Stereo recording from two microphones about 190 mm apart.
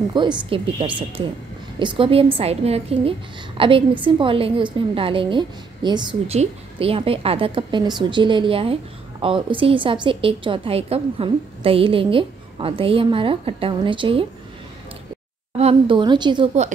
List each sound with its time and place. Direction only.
0.1 s a woman's voice: 25° right (ahead or behind)
15.6 s a woman's voice: 25° right (ahead or behind)